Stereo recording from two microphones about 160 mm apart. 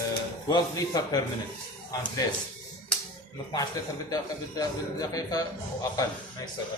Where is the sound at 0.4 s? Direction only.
20° left (ahead or behind).